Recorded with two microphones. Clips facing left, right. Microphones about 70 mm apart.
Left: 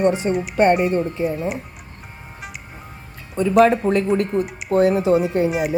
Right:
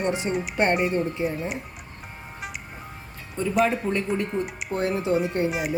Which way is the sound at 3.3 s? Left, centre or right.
Left.